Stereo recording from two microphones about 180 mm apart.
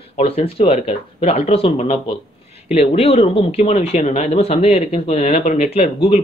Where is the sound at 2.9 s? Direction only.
35° left (ahead or behind).